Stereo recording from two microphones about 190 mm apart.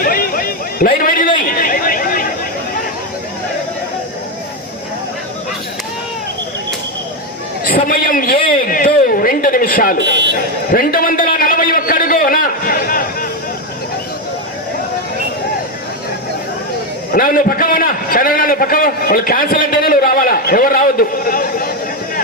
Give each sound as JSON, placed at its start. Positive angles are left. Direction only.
{"t": 0.0, "sound": "a sound", "side_deg": 50}
{"t": 1.0, "sound": "a man's voice", "side_deg": 50}
{"t": 1.5, "sound": "chatter", "side_deg": 50}
{"t": 7.9, "sound": "a man's voice", "side_deg": 50}
{"t": 10.7, "sound": "a sound", "side_deg": 50}
{"t": 17.1, "sound": "a man's voice", "side_deg": 50}